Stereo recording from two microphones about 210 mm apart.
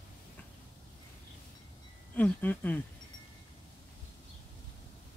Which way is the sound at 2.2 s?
10° left (ahead or behind).